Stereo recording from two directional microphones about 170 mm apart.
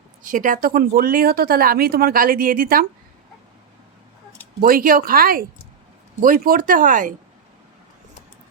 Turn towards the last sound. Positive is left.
turn(degrees=-50)  # may be behind; listen again after turning